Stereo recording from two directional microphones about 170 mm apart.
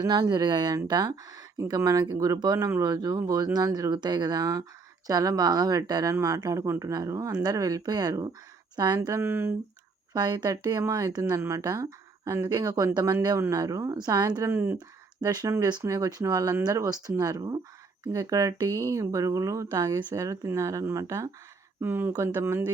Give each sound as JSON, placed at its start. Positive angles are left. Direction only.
{"t": 0.0, "sound": "speech", "side_deg": -25}